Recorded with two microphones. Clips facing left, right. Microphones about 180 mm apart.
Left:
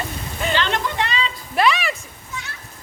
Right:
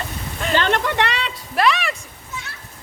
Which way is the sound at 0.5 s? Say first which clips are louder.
Right 5 dB; 55° right (ahead or behind).